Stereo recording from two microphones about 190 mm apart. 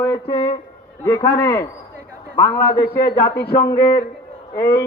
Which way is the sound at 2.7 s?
50° left (ahead or behind).